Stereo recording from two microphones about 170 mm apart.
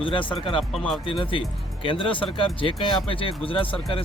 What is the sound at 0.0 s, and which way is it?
Speech, 30° left (ahead or behind).